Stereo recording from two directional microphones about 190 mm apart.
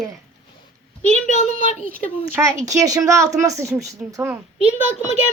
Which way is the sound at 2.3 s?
15° right (ahead or behind).